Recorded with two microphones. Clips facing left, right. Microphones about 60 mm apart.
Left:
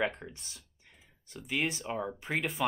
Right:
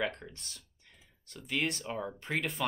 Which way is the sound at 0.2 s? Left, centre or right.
Centre.